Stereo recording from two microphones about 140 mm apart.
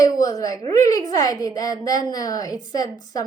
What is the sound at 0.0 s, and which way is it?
A woman's voice, 25° left (ahead or behind).